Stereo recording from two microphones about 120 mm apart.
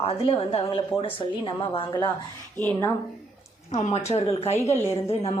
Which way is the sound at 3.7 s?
65° left (ahead or behind).